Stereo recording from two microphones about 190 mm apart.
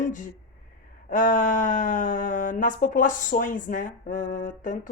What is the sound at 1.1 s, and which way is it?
Speech, 45° left (ahead or behind).